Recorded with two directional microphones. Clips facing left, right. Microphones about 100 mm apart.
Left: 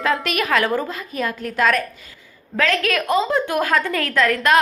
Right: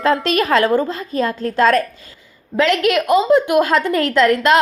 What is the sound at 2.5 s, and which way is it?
A woman's voice, 20° right (ahead or behind).